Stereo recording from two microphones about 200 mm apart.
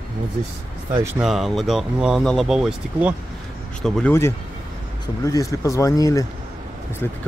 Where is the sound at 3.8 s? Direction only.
10° left (ahead or behind).